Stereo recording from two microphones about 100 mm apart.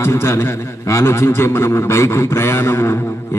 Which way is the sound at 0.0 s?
25° left (ahead or behind).